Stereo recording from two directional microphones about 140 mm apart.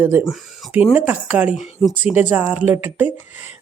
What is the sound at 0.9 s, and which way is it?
Speech, 10° right (ahead or behind).